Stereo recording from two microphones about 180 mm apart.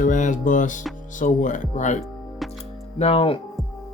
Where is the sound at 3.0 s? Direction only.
30° left (ahead or behind).